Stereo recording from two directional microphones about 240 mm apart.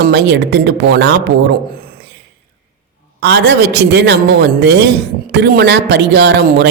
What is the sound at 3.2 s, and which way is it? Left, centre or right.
A man's voice, right.